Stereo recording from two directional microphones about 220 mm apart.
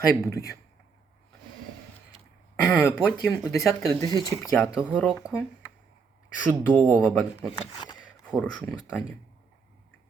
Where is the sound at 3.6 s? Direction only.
15° left (ahead or behind).